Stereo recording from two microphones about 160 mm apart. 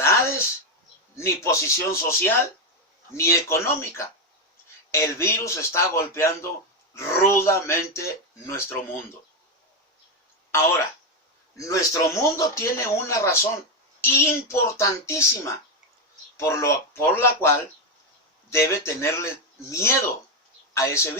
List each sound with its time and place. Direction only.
0.0 s a sound: 15° left (ahead or behind)
1.1 s speech: 20° left (ahead or behind)
10.5 s a man's voice: 15° left (ahead or behind)
18.5 s speech: 15° left (ahead or behind)